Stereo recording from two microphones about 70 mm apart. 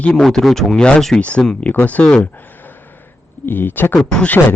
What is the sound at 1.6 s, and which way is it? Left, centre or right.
Speech, left.